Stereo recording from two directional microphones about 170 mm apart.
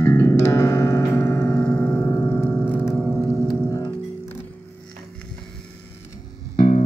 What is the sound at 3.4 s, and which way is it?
Music, 25° left (ahead or behind).